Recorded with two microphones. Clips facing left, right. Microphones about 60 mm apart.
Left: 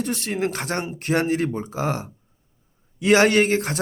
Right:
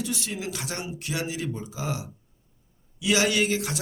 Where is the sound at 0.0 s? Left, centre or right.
Left.